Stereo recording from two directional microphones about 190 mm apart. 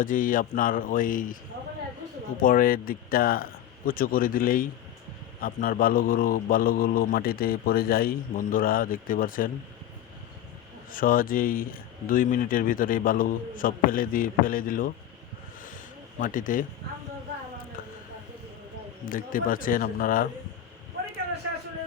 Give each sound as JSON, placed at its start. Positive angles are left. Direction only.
{"t": 0.0, "sound": "a man's voice", "side_deg": 45}
{"t": 2.4, "sound": "a man's voice", "side_deg": 45}
{"t": 10.9, "sound": "a man's voice", "side_deg": 50}
{"t": 16.2, "sound": "a man's voice", "side_deg": 45}
{"t": 19.0, "sound": "a man's voice", "side_deg": 45}